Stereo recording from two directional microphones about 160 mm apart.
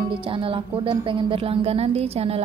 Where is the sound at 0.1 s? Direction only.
35° right (ahead or behind).